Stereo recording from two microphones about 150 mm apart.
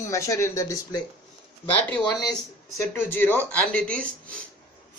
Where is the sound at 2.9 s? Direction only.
15° left (ahead or behind).